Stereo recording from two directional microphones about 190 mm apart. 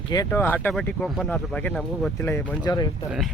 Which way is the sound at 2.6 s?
20° left (ahead or behind).